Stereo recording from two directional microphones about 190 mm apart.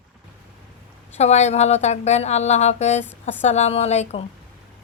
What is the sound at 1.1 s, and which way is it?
Speech, 35° left (ahead or behind).